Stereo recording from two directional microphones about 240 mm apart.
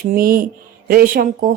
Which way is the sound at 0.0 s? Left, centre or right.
Right.